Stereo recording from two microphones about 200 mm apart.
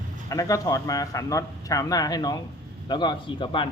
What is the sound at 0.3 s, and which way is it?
A man's voice, 15° left (ahead or behind).